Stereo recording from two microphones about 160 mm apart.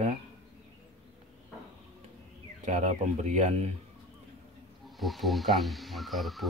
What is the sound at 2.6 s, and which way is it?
Speech, 45° right (ahead or behind).